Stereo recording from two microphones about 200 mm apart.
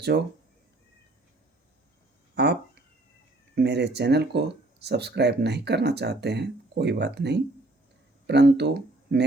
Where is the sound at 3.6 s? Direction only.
55° right (ahead or behind).